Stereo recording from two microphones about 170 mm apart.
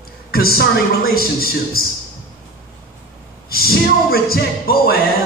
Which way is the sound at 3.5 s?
60° left (ahead or behind).